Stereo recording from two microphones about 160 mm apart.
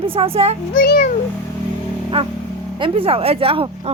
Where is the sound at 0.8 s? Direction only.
70° left (ahead or behind).